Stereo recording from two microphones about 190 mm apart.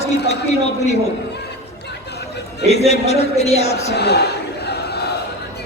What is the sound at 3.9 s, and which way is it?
Speech, 60° left (ahead or behind).